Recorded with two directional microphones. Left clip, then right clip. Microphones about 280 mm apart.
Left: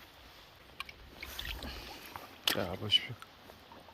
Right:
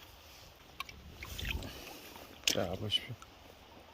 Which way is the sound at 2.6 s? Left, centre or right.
Centre.